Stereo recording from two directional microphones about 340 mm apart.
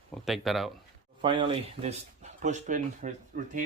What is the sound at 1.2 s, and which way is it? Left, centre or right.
Speech, centre.